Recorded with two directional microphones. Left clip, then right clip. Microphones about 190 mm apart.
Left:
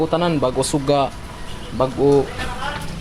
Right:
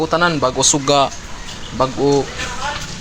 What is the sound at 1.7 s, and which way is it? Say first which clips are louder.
Speech: right 1 dB; 25° right (ahead or behind).